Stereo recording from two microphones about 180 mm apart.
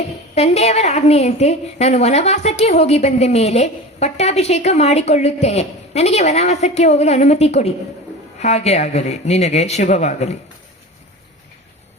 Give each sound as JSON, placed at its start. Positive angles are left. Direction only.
{"t": 0.3, "sound": "a woman's voice", "side_deg": 35}